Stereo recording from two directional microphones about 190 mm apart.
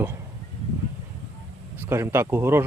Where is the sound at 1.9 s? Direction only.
15° right (ahead or behind).